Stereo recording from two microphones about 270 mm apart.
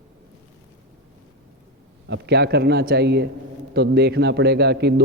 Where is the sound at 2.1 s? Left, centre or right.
Right.